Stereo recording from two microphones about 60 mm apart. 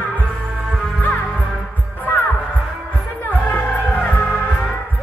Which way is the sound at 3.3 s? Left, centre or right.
Left.